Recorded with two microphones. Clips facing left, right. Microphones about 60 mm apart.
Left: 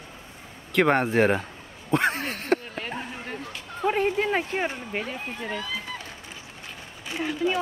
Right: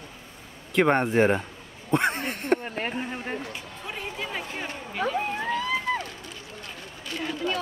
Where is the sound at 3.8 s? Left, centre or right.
Left.